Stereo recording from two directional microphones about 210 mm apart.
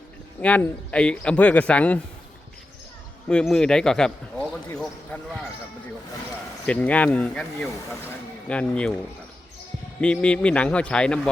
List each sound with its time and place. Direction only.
0.4 s a man's voice: 5° left (ahead or behind)
3.2 s speech: 5° left (ahead or behind)
6.7 s speech: 5° left (ahead or behind)
10.0 s speech: 5° left (ahead or behind)